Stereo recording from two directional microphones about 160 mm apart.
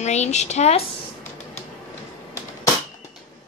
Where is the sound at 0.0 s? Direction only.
45° left (ahead or behind).